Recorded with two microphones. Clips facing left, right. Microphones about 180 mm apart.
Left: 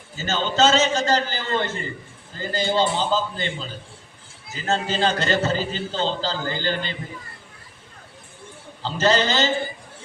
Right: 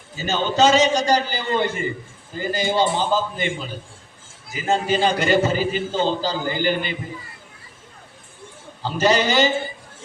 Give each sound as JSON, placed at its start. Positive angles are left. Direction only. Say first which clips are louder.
{"t": 0.2, "sound": "a man's voice", "louder": "right 2 dB", "side_deg": -15}
{"t": 8.8, "sound": "a man's voice", "louder": "right 1 dB", "side_deg": -15}